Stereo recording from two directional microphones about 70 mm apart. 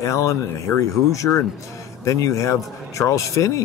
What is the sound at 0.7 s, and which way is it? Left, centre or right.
Speech, left.